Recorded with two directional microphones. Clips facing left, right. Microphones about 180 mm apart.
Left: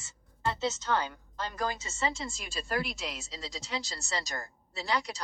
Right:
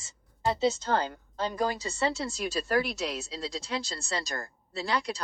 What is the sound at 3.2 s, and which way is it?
A woman's voice, 60° right (ahead or behind).